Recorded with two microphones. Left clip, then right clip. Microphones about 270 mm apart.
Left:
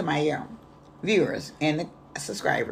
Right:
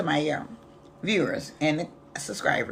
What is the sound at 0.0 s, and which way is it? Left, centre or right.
Speech, centre.